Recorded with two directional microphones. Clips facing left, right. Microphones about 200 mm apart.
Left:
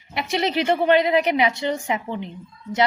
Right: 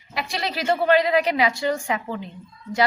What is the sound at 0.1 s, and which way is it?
A woman's voice, 20° left (ahead or behind).